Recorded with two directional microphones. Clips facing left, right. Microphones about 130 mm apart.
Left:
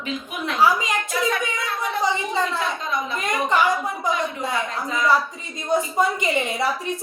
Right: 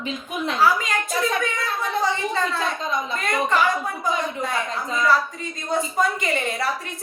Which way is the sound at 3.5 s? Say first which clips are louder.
Left 3 dB; 20° left (ahead or behind).